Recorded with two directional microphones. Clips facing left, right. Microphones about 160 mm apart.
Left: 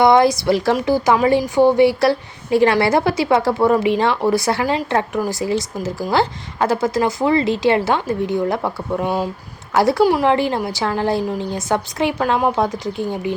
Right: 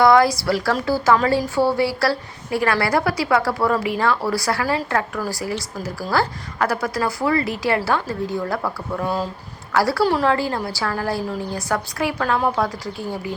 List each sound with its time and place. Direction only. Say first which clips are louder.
0.0 s a woman's voice: left 2 dB; 20° left (ahead or behind)